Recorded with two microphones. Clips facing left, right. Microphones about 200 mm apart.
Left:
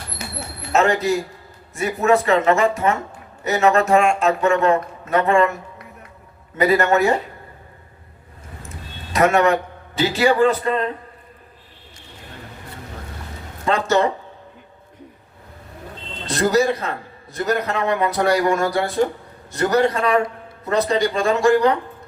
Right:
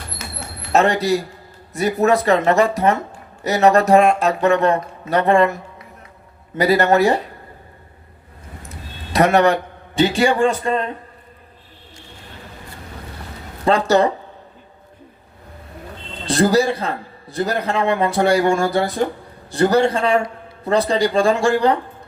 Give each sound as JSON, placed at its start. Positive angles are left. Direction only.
{"t": 0.7, "sound": "a man's voice", "side_deg": -35}
{"t": 6.6, "sound": "a man's voice", "side_deg": -35}
{"t": 9.1, "sound": "a man's voice", "side_deg": -35}
{"t": 13.7, "sound": "a man's voice", "side_deg": -35}
{"t": 16.2, "sound": "a man's voice", "side_deg": -30}